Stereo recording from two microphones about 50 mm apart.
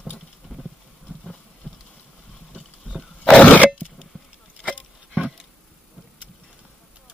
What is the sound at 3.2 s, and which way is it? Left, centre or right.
Cough, left.